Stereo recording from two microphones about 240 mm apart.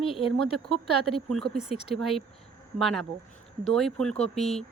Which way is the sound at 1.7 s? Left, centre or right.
Left.